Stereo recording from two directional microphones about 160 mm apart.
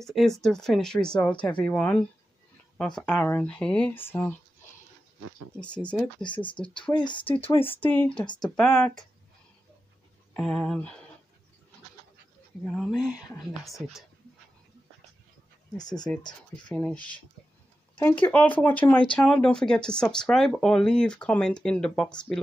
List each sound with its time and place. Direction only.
0.0 s speech: centre (ahead or behind)
5.6 s speech: 10° left (ahead or behind)
6.2 s speech: 30° left (ahead or behind)
7.8 s speech: 10° left (ahead or behind)
10.3 s speech: 5° left (ahead or behind)
12.6 s speech: centre (ahead or behind)
15.8 s speech: 25° left (ahead or behind)
16.7 s speech: 10° left (ahead or behind)
18.3 s speech: 10° left (ahead or behind)